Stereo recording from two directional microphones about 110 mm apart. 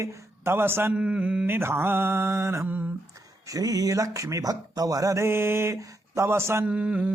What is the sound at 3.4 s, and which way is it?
Speech, 30° right (ahead or behind).